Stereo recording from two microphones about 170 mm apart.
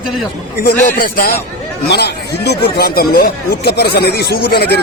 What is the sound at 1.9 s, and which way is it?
Speech, 75° left (ahead or behind).